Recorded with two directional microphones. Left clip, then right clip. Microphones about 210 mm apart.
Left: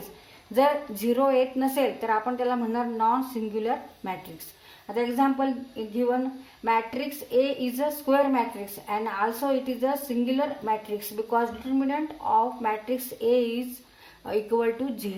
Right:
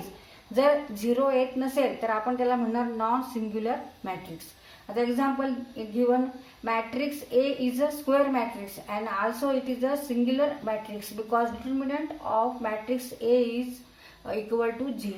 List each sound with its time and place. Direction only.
0.5 s a woman's voice: 40° left (ahead or behind)